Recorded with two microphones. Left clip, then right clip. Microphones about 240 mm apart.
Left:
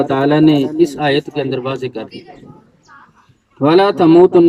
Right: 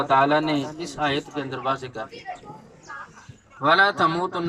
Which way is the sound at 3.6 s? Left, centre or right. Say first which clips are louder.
Left 7 dB; left.